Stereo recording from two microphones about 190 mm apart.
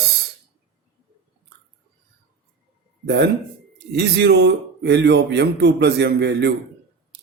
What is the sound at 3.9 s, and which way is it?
Speech, 60° right (ahead or behind).